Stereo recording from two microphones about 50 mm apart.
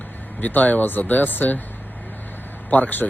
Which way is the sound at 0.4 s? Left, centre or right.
Left.